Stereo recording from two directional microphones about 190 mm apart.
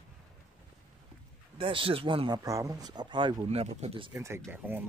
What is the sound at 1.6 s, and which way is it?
Speech, 30° right (ahead or behind).